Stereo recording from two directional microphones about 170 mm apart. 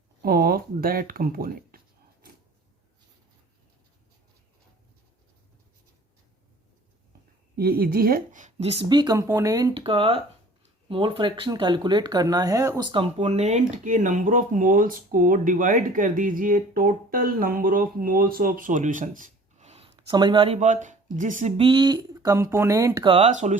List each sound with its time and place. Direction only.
0.2 s a sound: 60° right (ahead or behind)
7.5 s speech: 65° right (ahead or behind); by 13.1 s 25° right (ahead or behind)
13.1 s speech: 40° right (ahead or behind)
20.6 s speech: 45° right (ahead or behind)
21.6 s speech: 30° right (ahead or behind)
23.0 s speech: 35° right (ahead or behind)